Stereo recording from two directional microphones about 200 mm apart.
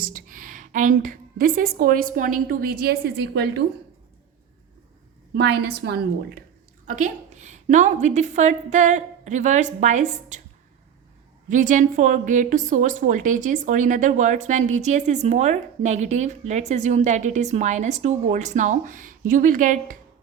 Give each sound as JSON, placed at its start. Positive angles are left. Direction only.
{"t": 0.0, "sound": "a woman's voice", "side_deg": -45}
{"t": 5.3, "sound": "a woman's voice", "side_deg": -55}
{"t": 6.8, "sound": "a woman's voice", "side_deg": -40}
{"t": 11.4, "sound": "a woman's voice", "side_deg": -40}